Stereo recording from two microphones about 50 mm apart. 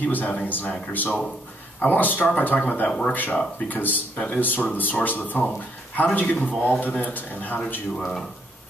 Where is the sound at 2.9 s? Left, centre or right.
Centre.